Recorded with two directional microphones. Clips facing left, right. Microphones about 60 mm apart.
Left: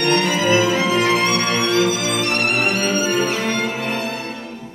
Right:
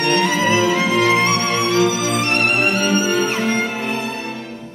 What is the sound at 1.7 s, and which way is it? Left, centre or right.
Music, right.